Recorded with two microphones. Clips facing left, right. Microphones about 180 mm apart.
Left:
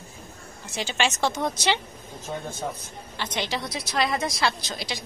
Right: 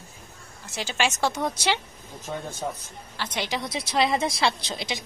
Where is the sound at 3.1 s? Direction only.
10° right (ahead or behind).